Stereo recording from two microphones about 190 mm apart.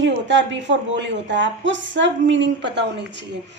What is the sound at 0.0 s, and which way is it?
A woman's voice, 70° right (ahead or behind).